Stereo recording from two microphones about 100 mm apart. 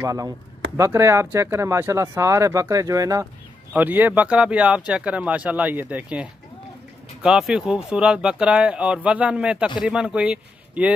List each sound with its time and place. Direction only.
0.0 s speech: 30° right (ahead or behind)
3.7 s speech: 15° right (ahead or behind)
7.2 s speech: 5° right (ahead or behind)